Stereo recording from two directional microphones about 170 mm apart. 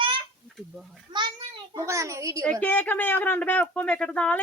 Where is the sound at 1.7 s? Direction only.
15° right (ahead or behind).